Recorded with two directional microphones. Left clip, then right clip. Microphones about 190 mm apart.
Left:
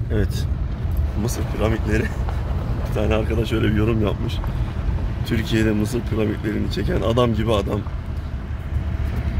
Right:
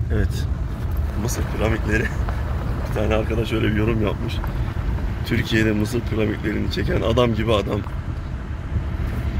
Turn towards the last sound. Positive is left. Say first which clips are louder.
# right 1 dB
turn(degrees=10)  # may be behind; listen again after turning